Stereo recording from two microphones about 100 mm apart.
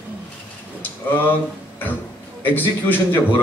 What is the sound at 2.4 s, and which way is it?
Speech, 20° left (ahead or behind).